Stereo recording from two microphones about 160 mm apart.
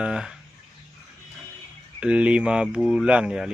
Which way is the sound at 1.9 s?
5° right (ahead or behind).